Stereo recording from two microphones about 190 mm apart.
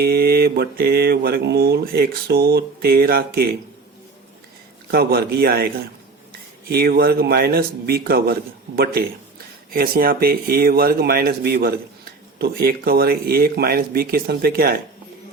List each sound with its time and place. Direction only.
0.0 s mantra: 55° right (ahead or behind)
4.9 s speech: 55° right (ahead or behind)